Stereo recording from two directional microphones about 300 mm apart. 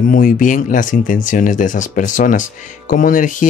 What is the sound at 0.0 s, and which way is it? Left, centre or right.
Speech, left.